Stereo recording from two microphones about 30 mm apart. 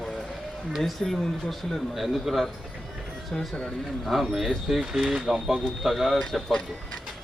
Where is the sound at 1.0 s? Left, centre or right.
Centre.